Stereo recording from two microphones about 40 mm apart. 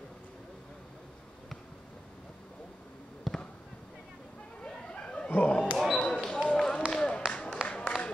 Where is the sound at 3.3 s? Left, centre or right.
Centre.